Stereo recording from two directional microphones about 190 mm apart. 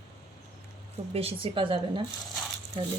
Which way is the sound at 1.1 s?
30° right (ahead or behind).